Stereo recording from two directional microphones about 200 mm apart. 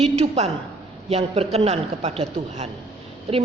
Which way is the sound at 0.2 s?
30° right (ahead or behind).